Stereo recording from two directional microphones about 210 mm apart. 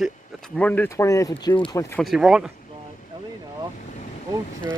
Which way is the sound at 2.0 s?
Centre (ahead or behind).